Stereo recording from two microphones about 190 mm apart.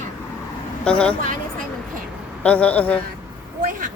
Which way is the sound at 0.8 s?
5° left (ahead or behind).